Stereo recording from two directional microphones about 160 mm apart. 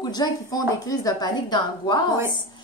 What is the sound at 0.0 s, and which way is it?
A woman's voice, 25° left (ahead or behind).